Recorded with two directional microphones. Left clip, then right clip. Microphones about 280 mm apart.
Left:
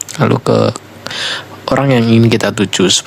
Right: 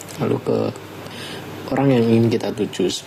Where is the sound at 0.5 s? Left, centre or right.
Left.